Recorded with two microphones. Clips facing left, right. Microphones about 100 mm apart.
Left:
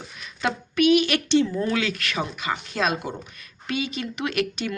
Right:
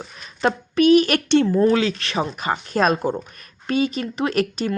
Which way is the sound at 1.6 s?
30° right (ahead or behind).